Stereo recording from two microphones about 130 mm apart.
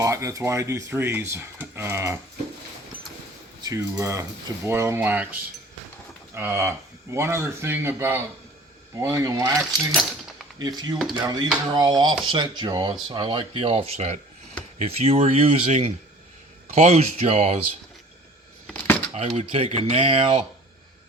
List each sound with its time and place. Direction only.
0.0 s speech: 25° right (ahead or behind)
3.6 s speech: 25° right (ahead or behind)
9.9 s keys jangling: centre (ahead or behind)
10.6 s speech: 30° right (ahead or behind); by 17.6 s 55° right (ahead or behind)
18.7 s a sound: 10° left (ahead or behind)
19.4 s speech: 55° right (ahead or behind)